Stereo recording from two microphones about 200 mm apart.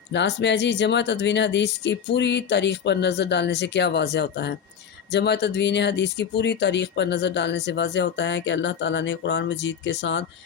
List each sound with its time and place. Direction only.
0.1 s speech: 60° left (ahead or behind)